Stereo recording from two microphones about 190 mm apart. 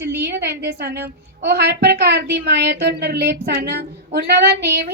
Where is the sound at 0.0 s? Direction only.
60° right (ahead or behind).